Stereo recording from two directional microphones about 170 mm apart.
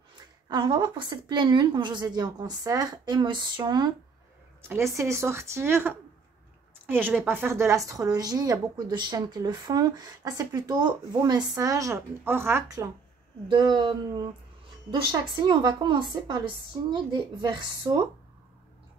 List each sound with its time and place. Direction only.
0.5 s speech: 25° right (ahead or behind)
4.9 s speech: 15° right (ahead or behind)